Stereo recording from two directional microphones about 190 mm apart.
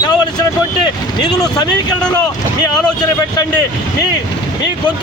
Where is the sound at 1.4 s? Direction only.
20° left (ahead or behind).